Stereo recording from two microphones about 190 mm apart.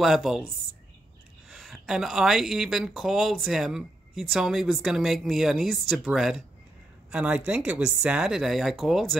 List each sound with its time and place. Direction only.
0.0 s speech: centre (ahead or behind)
1.5 s speech: centre (ahead or behind)